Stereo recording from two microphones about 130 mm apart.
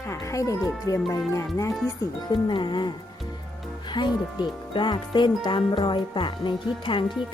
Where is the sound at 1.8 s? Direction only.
35° left (ahead or behind).